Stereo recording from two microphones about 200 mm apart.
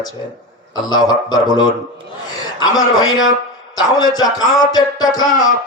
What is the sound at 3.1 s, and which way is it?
Speech, 80° left.